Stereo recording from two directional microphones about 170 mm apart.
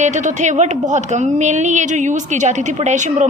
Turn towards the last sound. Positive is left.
turn(degrees=-45)  # may be behind; listen again after turning